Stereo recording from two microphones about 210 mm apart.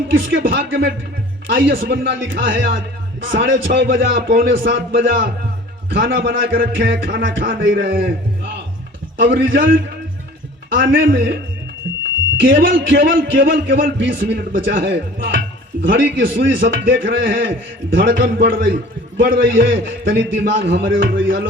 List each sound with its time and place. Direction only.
0.1 s a man's voice: 60° right (ahead or behind)
11.9 s music: 60° right (ahead or behind)
12.4 s a man's voice: 60° right (ahead or behind)